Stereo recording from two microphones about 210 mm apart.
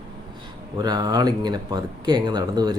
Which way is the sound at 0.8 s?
20° right (ahead or behind).